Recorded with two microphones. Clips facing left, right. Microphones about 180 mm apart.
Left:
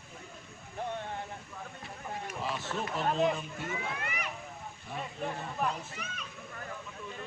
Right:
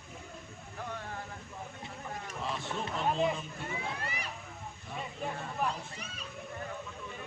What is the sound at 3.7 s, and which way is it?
Speech, 35° right (ahead or behind).